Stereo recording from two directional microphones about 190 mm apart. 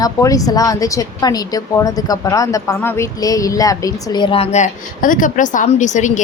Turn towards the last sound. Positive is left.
turn(degrees=40)  # may be behind; listen again after turning